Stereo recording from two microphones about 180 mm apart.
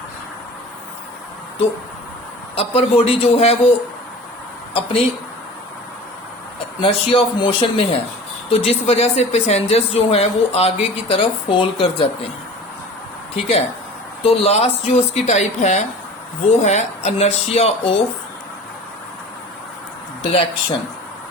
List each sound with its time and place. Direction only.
2.6 s speech: 35° left (ahead or behind)
4.7 s a woman's voice: 30° left (ahead or behind)
6.8 s speech: 30° left (ahead or behind)
13.3 s speech: 35° left (ahead or behind)
20.2 s speech: 30° left (ahead or behind)